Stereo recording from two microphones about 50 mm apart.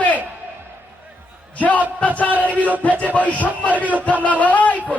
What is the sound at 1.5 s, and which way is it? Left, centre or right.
Speech, left.